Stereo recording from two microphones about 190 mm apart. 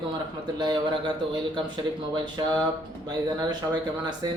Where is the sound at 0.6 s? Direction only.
25° right (ahead or behind).